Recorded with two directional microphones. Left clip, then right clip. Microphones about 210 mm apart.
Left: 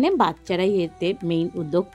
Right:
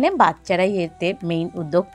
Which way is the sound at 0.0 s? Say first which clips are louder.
Right 4 dB; 20° right (ahead or behind).